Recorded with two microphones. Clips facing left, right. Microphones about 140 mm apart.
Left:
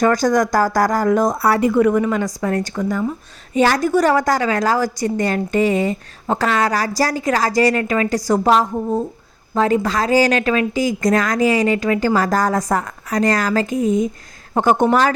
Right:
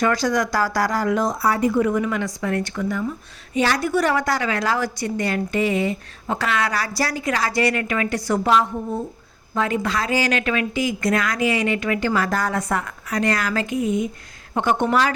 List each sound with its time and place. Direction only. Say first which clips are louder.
0.0 s speech: left 5 dB; 45° left (ahead or behind); by 2.0 s 75° left (ahead or behind)
2.0 s a woman's voice: left 4 dB; 40° left (ahead or behind)